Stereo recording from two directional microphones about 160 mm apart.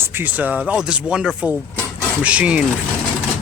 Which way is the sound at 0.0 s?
15° right (ahead or behind).